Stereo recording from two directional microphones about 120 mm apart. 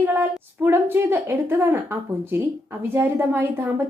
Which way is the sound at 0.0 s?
20° right (ahead or behind).